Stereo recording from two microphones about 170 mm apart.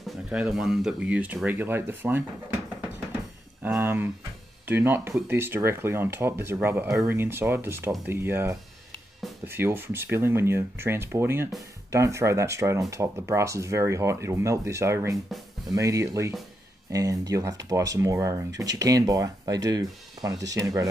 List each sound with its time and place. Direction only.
0.0 s speech: 5° right (ahead or behind)
3.6 s speech: 10° right (ahead or behind)